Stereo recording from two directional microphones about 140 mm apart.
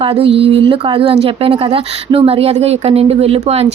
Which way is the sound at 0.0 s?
40° right (ahead or behind).